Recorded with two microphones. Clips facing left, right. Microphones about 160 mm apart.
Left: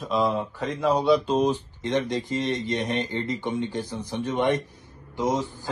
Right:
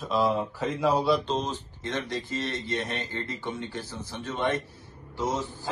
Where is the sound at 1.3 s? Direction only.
15° left (ahead or behind).